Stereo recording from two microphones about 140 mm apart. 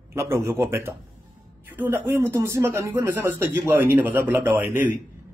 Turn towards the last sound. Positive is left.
turn(degrees=-15)  # may be behind; listen again after turning